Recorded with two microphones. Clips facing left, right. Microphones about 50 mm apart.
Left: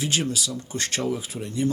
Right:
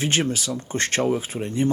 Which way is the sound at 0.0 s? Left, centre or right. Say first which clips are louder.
Right 3 dB; right.